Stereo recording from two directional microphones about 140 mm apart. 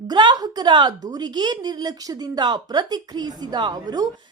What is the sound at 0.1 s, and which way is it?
A woman's voice, 30° right (ahead or behind).